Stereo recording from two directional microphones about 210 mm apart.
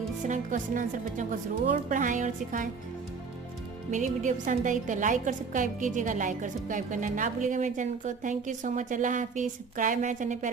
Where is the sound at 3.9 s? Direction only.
35° right (ahead or behind).